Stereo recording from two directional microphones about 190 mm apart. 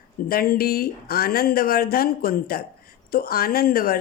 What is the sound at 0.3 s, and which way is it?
A woman's voice, 50° left (ahead or behind).